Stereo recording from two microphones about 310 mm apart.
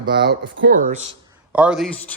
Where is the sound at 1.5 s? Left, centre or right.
Centre.